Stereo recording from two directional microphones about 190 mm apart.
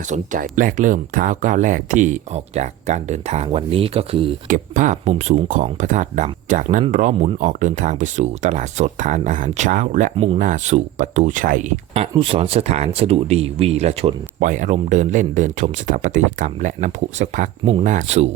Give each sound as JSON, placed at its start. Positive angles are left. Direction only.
{"t": 0.1, "sound": "speech", "side_deg": -45}
{"t": 4.4, "sound": "speech", "side_deg": -45}
{"t": 12.1, "sound": "speech", "side_deg": -30}